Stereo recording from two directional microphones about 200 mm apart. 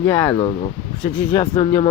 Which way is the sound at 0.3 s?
25° left (ahead or behind).